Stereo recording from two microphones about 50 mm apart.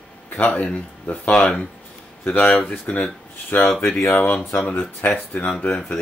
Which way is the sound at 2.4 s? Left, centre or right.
Left.